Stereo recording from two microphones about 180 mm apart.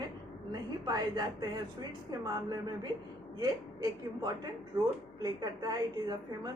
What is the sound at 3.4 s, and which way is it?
A woman's voice, 20° right (ahead or behind).